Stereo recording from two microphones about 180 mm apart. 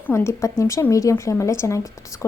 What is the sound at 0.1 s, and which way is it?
A woman's voice, 15° left (ahead or behind).